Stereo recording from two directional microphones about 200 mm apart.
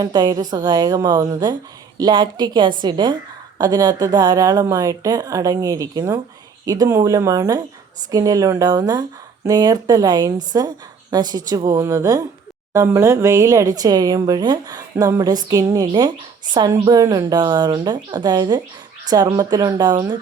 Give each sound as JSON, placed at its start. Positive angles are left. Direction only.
{"t": 0.0, "sound": "a woman's voice", "side_deg": -20}